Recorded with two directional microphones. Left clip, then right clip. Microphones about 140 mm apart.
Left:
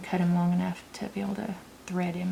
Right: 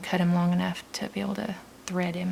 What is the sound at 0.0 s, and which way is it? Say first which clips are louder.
Speech: right 2 dB; 35° right (ahead or behind).